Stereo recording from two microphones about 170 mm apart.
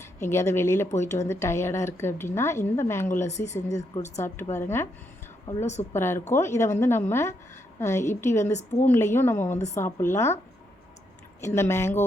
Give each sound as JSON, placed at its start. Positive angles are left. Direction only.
{"t": 0.2, "sound": "a woman's voice", "side_deg": 15}
{"t": 3.2, "sound": "a woman's voice", "side_deg": 40}
{"t": 3.5, "sound": "a woman's voice", "side_deg": 20}
{"t": 8.5, "sound": "a woman's voice", "side_deg": 40}
{"t": 8.9, "sound": "a woman's voice", "side_deg": 15}
{"t": 11.3, "sound": "a woman's voice", "side_deg": 15}